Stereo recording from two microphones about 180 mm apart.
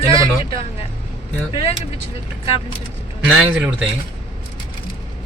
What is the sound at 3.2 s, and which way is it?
Speech, 5° right (ahead or behind).